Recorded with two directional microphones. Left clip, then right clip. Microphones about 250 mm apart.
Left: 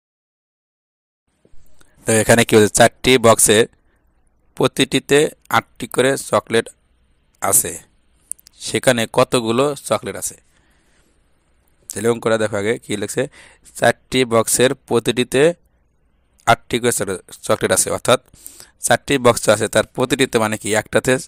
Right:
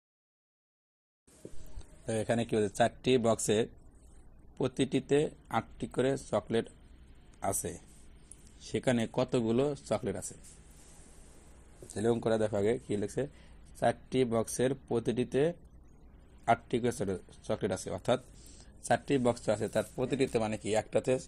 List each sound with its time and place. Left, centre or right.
1.8 s speech: left
11.9 s speech: left